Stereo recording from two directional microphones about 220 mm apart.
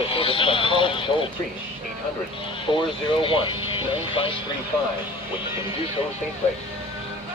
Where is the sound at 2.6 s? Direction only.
25° left (ahead or behind).